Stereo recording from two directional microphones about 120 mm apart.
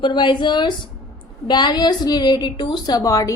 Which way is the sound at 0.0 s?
40° left (ahead or behind).